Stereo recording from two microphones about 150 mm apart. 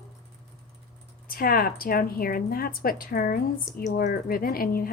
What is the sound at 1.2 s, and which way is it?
A woman's voice, 75° left (ahead or behind).